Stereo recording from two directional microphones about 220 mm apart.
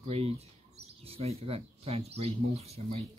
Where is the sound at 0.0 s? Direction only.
25° right (ahead or behind).